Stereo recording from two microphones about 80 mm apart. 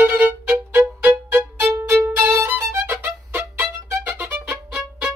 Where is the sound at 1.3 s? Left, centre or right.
Right.